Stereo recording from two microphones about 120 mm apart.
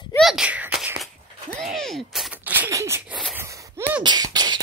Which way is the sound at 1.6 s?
Centre (ahead or behind).